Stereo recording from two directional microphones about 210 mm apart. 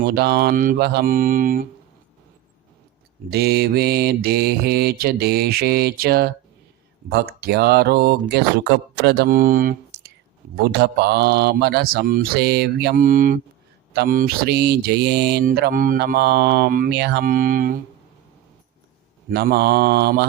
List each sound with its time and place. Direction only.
0.0 s mantra: 50° right (ahead or behind)
3.2 s mantra: 50° right (ahead or behind)
19.3 s mantra: 50° right (ahead or behind)